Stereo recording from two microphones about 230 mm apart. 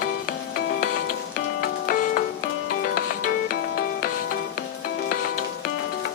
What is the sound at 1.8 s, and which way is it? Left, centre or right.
Music, left.